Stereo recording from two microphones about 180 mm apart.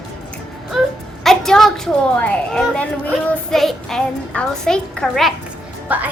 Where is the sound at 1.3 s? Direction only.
Centre (ahead or behind).